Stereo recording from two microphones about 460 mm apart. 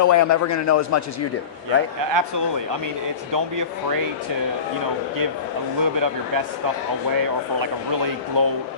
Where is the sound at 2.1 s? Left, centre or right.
Right.